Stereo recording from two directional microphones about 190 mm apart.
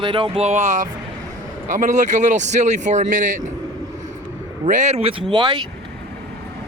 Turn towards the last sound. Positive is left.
turn(degrees=-20)  # may be behind; listen again after turning